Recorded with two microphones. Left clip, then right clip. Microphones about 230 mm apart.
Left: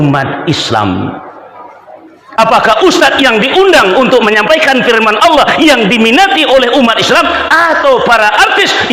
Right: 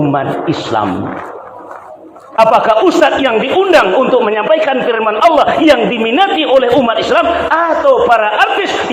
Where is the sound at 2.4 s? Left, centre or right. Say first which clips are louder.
Left 2 dB; left.